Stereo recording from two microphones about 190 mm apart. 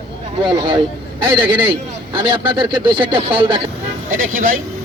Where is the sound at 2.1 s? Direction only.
25° right (ahead or behind).